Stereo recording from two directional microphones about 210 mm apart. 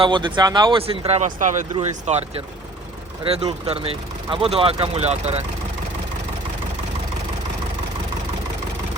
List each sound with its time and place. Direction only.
0.0 s speech: 25° right (ahead or behind)